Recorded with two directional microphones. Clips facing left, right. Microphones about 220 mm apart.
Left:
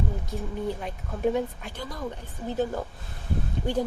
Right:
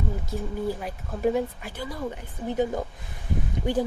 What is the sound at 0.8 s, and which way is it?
Speech, 5° right (ahead or behind).